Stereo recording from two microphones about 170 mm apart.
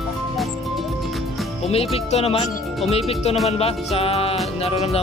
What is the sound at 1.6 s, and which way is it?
Music, 35° left (ahead or behind).